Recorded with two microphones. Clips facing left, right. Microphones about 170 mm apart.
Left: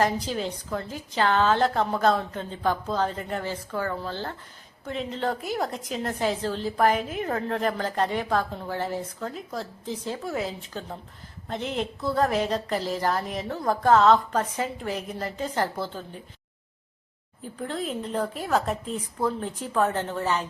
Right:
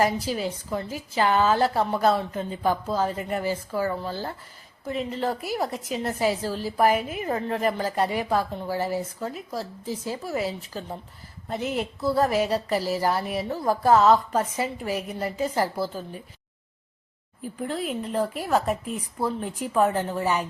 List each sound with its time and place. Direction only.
0.0 s a woman's voice: 5° right (ahead or behind)
17.6 s a woman's voice: 5° right (ahead or behind)